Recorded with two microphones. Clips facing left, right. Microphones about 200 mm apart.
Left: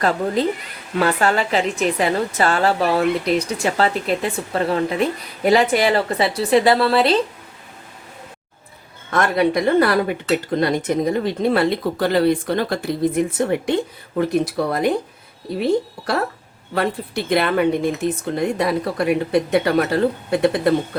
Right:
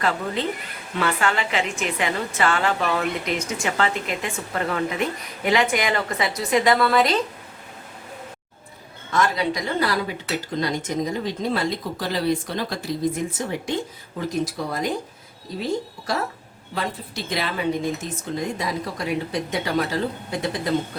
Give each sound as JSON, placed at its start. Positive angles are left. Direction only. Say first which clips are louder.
{"t": 0.0, "sound": "a woman's voice", "louder": "left 6 dB", "side_deg": 40}
{"t": 9.1, "sound": "speech", "louder": "left 5 dB", "side_deg": 60}